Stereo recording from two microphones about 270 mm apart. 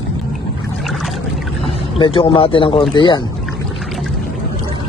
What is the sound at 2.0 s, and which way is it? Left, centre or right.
A man's voice, centre.